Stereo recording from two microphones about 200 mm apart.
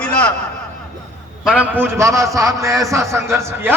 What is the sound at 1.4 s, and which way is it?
A man's voice, 5° right (ahead or behind).